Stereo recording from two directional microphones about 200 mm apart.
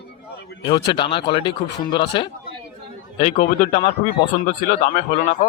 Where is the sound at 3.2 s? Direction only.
35° left (ahead or behind).